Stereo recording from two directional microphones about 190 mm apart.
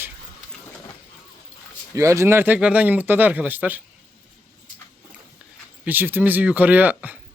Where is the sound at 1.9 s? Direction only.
15° right (ahead or behind).